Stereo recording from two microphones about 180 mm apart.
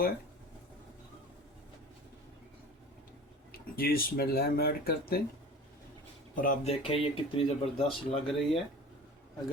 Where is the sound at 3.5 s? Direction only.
55° left (ahead or behind).